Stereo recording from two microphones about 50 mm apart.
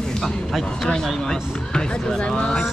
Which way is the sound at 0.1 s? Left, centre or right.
Centre.